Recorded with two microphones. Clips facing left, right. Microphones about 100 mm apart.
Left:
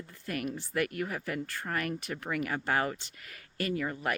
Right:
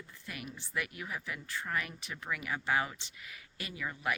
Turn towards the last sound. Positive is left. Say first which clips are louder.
# left 6 dB
turn(degrees=50)  # may be behind; listen again after turning